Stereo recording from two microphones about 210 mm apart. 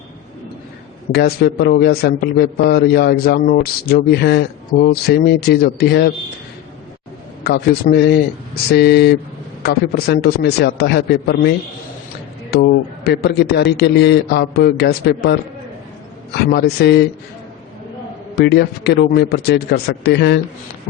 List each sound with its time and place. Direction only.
1.1 s a man's voice: 50° left (ahead or behind)
7.4 s a man's voice: 50° left (ahead or behind)
13.1 s a man's voice: 50° left (ahead or behind)
18.3 s a man's voice: 50° left (ahead or behind)